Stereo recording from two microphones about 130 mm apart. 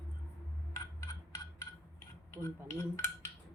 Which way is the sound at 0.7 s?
25° left (ahead or behind).